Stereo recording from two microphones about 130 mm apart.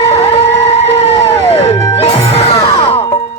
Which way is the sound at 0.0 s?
50° left (ahead or behind).